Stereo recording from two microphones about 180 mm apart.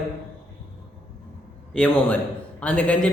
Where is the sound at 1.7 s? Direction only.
5° left (ahead or behind).